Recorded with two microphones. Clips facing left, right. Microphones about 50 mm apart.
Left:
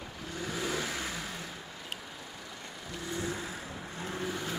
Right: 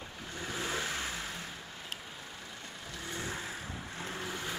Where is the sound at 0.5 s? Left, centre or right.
Right.